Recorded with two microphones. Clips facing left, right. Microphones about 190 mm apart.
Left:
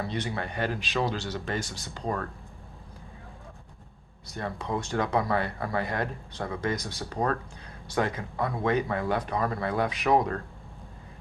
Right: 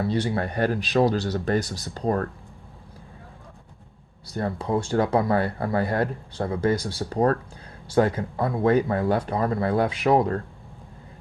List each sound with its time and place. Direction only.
0.1 s speech: 35° right (ahead or behind)
4.3 s speech: 30° right (ahead or behind)